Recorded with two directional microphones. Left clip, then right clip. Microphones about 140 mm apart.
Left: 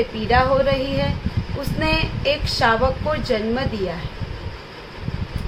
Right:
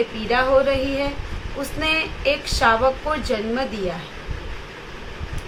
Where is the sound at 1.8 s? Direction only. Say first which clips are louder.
Even; 60° left (ahead or behind).